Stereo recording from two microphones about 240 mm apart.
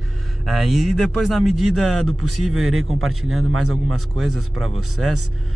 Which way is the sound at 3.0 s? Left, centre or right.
Right.